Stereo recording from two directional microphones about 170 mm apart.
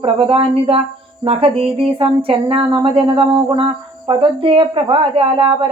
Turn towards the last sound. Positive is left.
turn(degrees=-30)  # may be behind; listen again after turning